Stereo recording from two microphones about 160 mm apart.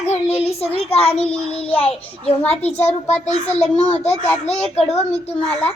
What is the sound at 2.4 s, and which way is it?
Speech, 10° left (ahead or behind).